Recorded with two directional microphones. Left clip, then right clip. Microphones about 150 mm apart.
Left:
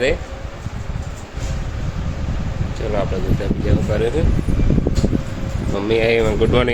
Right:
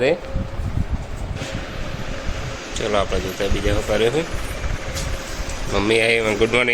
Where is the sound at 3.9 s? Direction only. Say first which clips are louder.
Right 2 dB; 10° left (ahead or behind).